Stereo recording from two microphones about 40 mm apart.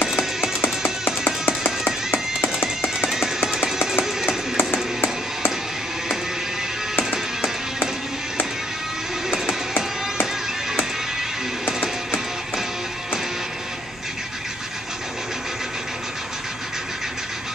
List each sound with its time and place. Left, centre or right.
0.2 s music: centre
0.6 s music: left
3.1 s music: centre
4.3 s music: left
11.6 s music: left